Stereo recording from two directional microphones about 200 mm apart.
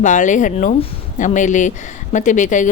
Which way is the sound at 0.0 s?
40° left (ahead or behind).